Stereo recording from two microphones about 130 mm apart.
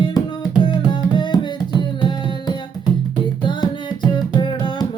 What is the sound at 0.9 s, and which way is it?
Tabla, 35° left (ahead or behind).